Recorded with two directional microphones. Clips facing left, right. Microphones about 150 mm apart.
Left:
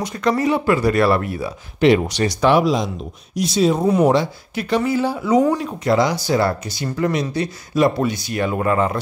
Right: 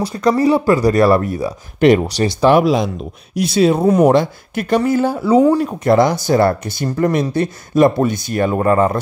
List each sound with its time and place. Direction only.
0.0 s speech: 35° right (ahead or behind)
2.0 s speech: 35° right (ahead or behind)
2.5 s speech: 60° right (ahead or behind)
3.9 s speech: 50° right (ahead or behind)